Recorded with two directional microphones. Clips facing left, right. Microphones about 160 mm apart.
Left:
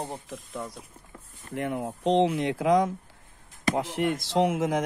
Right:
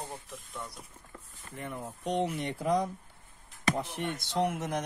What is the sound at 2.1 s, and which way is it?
Speech, 90° left.